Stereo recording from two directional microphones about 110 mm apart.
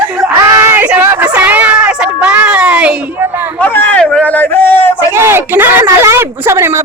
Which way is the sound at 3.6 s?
15° left (ahead or behind).